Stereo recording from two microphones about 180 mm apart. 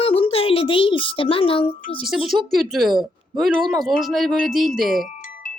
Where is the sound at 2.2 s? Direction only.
Centre (ahead or behind).